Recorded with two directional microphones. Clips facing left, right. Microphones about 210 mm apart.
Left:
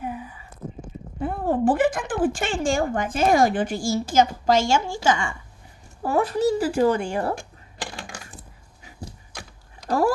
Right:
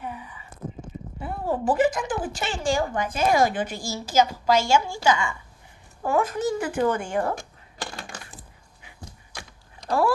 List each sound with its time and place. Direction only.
1.2 s speech: 50° left (ahead or behind); by 7.3 s 35° left (ahead or behind)
8.0 s coin: centre (ahead or behind)